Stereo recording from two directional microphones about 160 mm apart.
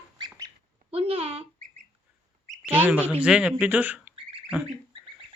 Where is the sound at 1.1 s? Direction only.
40° right (ahead or behind).